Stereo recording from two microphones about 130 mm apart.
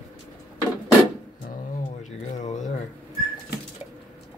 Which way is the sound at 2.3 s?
65° left (ahead or behind).